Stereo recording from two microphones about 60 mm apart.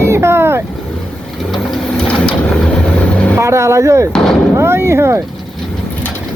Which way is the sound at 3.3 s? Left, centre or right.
Right.